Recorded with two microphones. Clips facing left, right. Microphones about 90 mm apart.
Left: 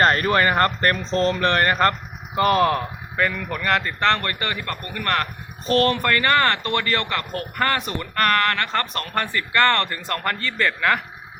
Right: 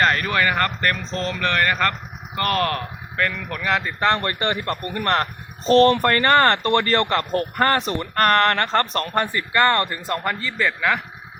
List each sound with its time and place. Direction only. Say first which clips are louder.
0.0 s speech: left 2 dB; 35° left (ahead or behind)
2.3 s speech: left 4 dB; 10° left (ahead or behind)
4.0 s a man's voice: right 1 dB; 20° right (ahead or behind); by 9.1 s 35° right (ahead or behind)
9.1 s a man's voice: even; 20° right (ahead or behind)